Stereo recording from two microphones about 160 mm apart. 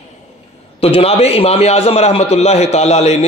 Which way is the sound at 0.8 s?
40° left (ahead or behind).